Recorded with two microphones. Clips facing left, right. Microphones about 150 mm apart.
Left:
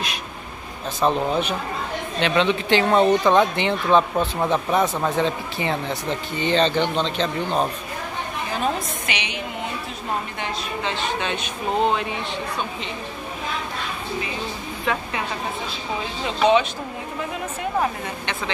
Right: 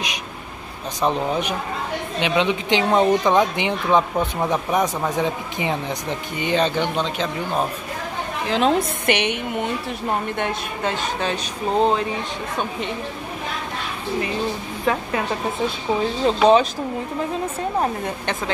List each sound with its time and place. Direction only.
1.0 s speech: 15° right (ahead or behind)
8.5 s a woman's voice: 85° right; by 9.3 s 60° right (ahead or behind)
10.4 s speech: 45° right (ahead or behind)
14.9 s speech: 40° right (ahead or behind)
16.3 s speech: 40° right (ahead or behind)